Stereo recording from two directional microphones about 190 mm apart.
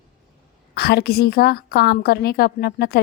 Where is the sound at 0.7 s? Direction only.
55° left (ahead or behind).